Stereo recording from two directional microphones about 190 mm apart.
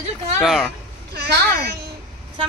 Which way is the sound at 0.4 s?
Centre (ahead or behind).